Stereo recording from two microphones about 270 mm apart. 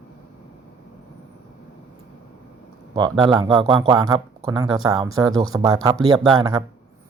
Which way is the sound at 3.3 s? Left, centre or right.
Centre.